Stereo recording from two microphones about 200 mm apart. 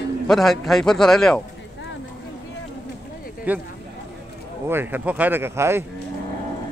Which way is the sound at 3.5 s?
10° right (ahead or behind).